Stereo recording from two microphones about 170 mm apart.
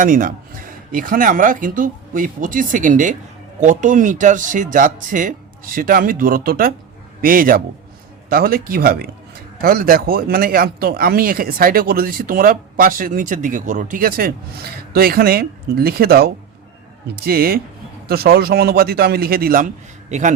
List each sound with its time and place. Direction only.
0.0 s a man's voice: 55° right (ahead or behind)